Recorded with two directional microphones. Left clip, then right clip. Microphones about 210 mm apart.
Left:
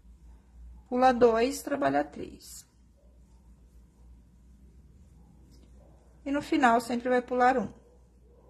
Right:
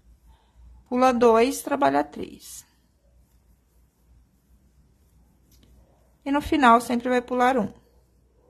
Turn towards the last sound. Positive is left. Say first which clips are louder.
# right 3 dB
turn(degrees=-25)  # may be behind; listen again after turning